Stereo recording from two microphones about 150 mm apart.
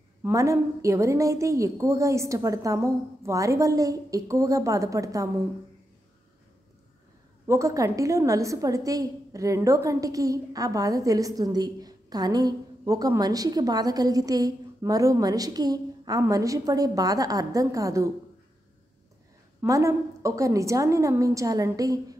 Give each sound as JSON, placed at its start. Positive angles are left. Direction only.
{"t": 0.2, "sound": "a woman's voice", "side_deg": -20}
{"t": 7.4, "sound": "a woman's voice", "side_deg": -20}
{"t": 19.6, "sound": "a woman's voice", "side_deg": -20}